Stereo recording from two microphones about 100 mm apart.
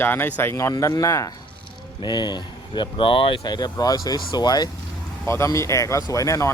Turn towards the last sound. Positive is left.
turn(degrees=30)  # may be behind; listen again after turning